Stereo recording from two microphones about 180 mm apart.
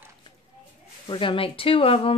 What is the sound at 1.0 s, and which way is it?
Speech, 25° left (ahead or behind).